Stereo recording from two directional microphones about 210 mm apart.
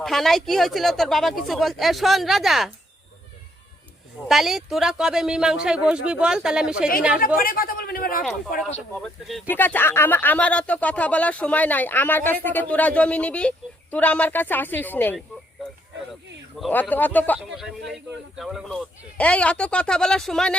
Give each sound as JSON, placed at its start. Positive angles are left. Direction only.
{"t": 0.0, "sound": "speech", "side_deg": 0}
{"t": 4.3, "sound": "speech", "side_deg": 0}
{"t": 7.3, "sound": "speech", "side_deg": 45}
{"t": 9.0, "sound": "speech", "side_deg": 0}
{"t": 16.6, "sound": "speech", "side_deg": 0}